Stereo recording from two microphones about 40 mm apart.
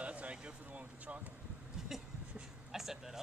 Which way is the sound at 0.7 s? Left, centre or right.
Right.